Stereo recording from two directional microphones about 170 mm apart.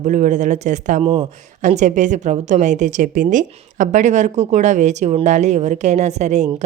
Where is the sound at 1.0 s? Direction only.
30° right (ahead or behind).